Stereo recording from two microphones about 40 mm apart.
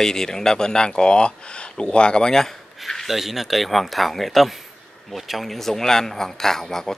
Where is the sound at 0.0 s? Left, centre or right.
Centre.